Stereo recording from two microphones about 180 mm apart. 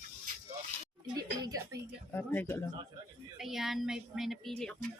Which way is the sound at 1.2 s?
20° right (ahead or behind).